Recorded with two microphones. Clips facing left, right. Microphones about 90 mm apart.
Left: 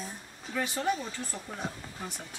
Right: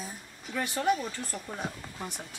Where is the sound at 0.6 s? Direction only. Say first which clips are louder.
Right 2 dB; 55° right (ahead or behind).